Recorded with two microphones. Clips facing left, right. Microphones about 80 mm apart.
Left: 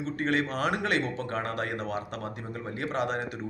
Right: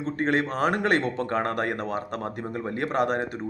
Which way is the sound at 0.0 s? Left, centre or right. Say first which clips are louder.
Right 3 dB; right.